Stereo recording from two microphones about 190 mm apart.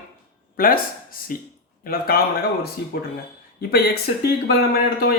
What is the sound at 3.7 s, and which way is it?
Speech, 55° left (ahead or behind).